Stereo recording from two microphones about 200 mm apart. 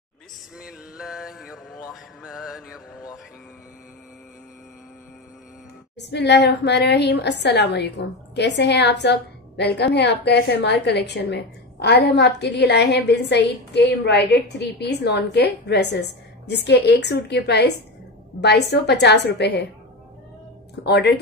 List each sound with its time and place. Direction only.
0.6 s mantra: 5° right (ahead or behind)
5.9 s a woman's voice: 55° left (ahead or behind)
20.8 s speech: 55° left (ahead or behind)